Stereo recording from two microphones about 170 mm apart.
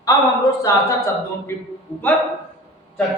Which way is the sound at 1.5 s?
15° left (ahead or behind).